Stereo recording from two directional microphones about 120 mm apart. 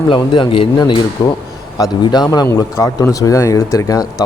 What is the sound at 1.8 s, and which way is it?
Speech, 35° left (ahead or behind).